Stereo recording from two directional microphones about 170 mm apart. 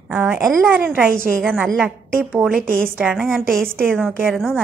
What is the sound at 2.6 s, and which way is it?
Speech, 55° right (ahead or behind).